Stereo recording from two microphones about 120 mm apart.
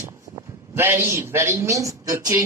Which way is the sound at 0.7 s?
20° right (ahead or behind).